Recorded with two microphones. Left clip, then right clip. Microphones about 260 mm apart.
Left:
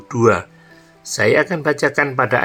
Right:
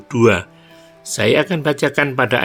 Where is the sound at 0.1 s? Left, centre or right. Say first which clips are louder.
Right 1 dB; right.